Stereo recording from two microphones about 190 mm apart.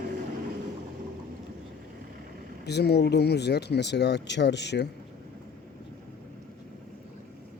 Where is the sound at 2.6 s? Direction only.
60° left (ahead or behind).